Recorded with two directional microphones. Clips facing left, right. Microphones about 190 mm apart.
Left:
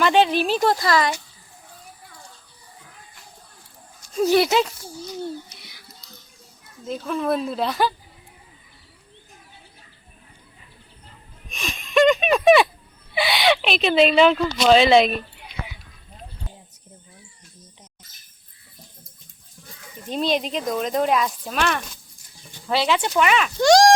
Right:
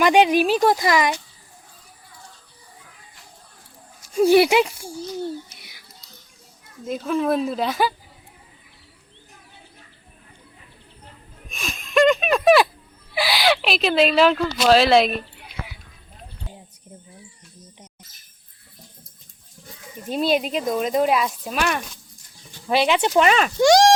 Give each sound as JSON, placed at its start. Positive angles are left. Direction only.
{"t": 0.0, "sound": "speech", "side_deg": -15}
{"t": 4.0, "sound": "speech", "side_deg": -10}
{"t": 6.8, "sound": "speech", "side_deg": -5}
{"t": 11.4, "sound": "a sound", "side_deg": 0}
{"t": 13.1, "sound": "speech", "side_deg": 0}
{"t": 20.1, "sound": "speech", "side_deg": -5}
{"t": 23.1, "sound": "speech", "side_deg": -35}
{"t": 23.6, "sound": "speech", "side_deg": -10}